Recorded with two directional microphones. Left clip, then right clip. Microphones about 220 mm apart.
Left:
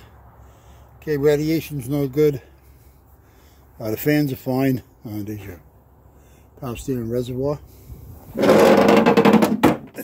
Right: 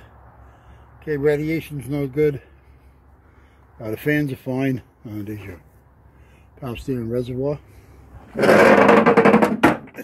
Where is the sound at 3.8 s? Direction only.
10° left (ahead or behind).